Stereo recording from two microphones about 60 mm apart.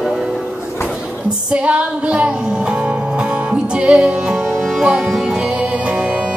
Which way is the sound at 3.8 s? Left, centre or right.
Centre.